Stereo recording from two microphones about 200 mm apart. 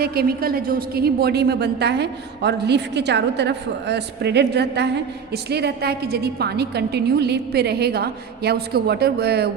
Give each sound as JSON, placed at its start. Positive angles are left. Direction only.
{"t": 0.0, "sound": "a woman's voice", "side_deg": -50}